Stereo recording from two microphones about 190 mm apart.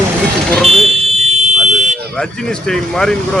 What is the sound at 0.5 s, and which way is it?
Speech, centre (ahead or behind).